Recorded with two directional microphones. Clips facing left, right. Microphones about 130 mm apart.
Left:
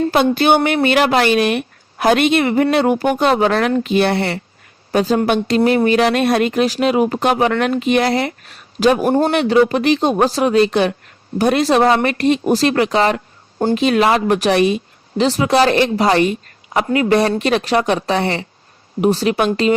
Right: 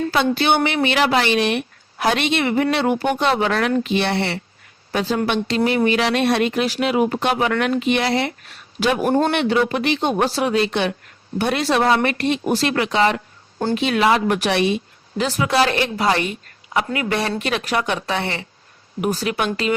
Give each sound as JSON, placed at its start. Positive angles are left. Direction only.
{"t": 0.1, "sound": "a woman's voice", "side_deg": 50}
{"t": 9.0, "sound": "speech", "side_deg": 30}